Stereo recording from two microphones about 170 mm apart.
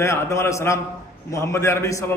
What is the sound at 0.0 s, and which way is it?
A man's voice, 15° left (ahead or behind).